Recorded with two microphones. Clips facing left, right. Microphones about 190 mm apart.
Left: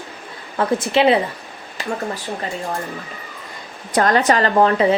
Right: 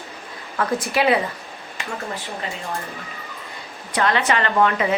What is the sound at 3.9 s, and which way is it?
Speech, 40° left (ahead or behind).